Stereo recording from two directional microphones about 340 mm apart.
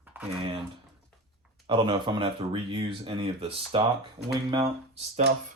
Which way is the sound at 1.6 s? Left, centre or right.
Centre.